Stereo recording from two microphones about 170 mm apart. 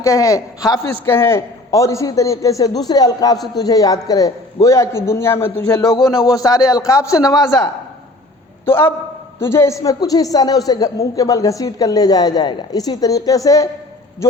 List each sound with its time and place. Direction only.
0.0 s a man's voice: 20° left (ahead or behind)
8.6 s a man's voice: 15° left (ahead or behind)